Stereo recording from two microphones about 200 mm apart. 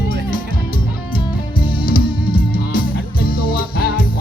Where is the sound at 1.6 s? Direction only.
45° left (ahead or behind).